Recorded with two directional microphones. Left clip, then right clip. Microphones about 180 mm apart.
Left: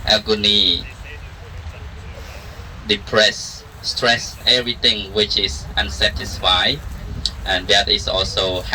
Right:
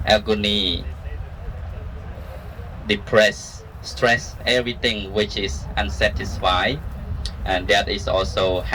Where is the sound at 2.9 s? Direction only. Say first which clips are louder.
Left 1 dB; 15° right (ahead or behind).